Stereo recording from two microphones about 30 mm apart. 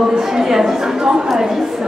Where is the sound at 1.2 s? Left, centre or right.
Centre.